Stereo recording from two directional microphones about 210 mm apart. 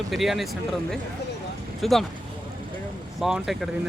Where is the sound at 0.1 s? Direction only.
Centre (ahead or behind).